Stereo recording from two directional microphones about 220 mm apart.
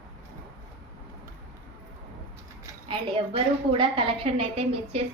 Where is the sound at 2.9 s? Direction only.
25° right (ahead or behind).